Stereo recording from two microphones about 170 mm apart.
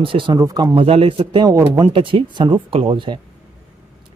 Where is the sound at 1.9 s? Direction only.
30° right (ahead or behind).